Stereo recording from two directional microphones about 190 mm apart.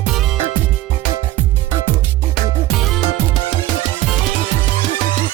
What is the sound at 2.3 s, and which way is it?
Music, centre (ahead or behind).